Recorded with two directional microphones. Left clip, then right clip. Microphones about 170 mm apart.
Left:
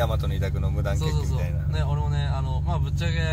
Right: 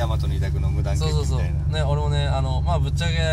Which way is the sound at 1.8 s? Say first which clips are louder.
Right 7 dB; 25° right (ahead or behind).